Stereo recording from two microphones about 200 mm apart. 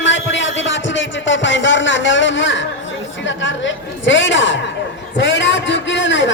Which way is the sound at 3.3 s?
65° left (ahead or behind).